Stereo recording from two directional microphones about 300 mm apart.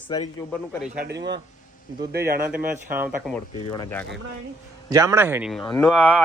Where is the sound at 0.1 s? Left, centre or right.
Centre.